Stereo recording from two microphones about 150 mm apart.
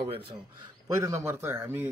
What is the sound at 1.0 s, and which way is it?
Speech, 15° right (ahead or behind).